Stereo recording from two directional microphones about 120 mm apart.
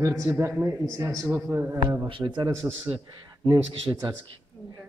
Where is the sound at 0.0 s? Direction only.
25° right (ahead or behind).